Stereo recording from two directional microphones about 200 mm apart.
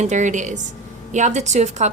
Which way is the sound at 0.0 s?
35° right (ahead or behind).